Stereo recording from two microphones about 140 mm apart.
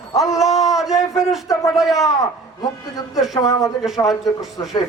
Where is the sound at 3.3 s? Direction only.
25° left (ahead or behind).